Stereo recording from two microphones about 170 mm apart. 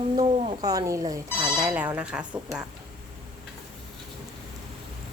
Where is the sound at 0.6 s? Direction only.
20° right (ahead or behind).